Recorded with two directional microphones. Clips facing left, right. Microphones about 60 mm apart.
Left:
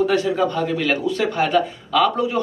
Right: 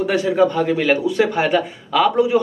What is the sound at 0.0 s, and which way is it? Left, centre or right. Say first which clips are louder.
A man's voice: right 2 dB; centre.